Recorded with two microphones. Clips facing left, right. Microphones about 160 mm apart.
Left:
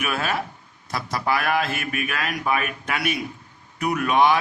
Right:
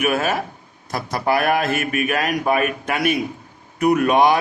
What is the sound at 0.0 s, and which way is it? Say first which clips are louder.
A man's voice: right 6 dB; 50° right (ahead or behind).